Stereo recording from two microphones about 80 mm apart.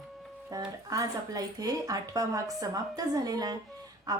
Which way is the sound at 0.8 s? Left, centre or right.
Right.